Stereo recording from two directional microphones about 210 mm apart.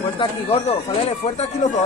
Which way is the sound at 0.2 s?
30° left (ahead or behind).